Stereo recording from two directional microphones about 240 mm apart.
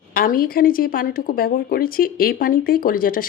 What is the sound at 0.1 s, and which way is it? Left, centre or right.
A woman's voice, left.